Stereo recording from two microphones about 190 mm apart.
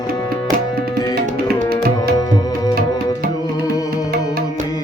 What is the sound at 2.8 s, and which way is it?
Tabla, 50° right (ahead or behind).